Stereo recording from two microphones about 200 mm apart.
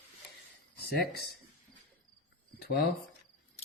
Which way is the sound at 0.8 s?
55° left (ahead or behind).